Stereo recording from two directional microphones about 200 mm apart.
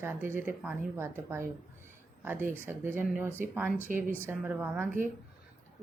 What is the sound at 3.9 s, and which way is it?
Speech, 40° right (ahead or behind).